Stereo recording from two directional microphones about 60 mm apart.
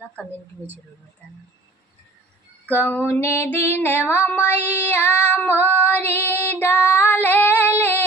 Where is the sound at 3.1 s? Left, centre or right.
Left.